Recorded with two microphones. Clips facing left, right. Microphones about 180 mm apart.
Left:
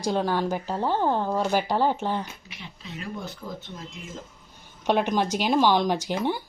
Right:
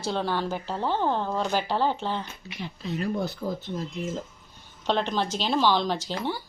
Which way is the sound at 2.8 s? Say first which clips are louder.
Right 7 dB; 40° right (ahead or behind).